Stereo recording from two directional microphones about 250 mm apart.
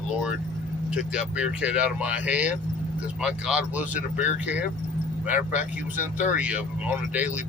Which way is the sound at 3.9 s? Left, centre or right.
Left.